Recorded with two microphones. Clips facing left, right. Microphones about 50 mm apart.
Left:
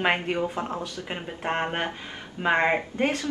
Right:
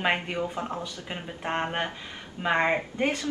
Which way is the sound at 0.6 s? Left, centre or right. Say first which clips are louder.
Left 2 dB; left.